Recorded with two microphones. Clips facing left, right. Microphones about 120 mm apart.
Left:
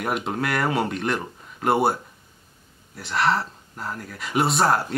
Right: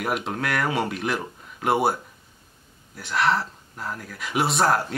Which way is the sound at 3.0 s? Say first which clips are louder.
Even; centre (ahead or behind).